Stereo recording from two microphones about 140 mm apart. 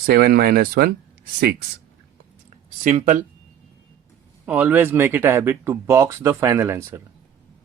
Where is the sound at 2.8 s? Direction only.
60° right (ahead or behind).